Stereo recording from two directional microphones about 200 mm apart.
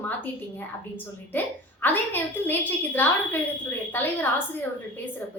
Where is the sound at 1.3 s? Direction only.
10° left (ahead or behind).